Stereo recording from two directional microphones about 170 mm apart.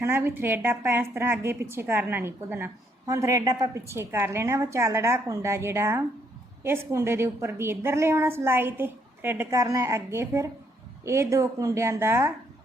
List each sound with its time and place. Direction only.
0.0 s a woman's voice: 15° right (ahead or behind)